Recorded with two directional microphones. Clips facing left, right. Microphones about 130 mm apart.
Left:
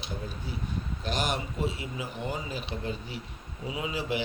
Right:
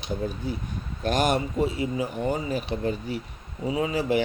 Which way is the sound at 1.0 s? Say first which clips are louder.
Right 9 dB; 50° right (ahead or behind).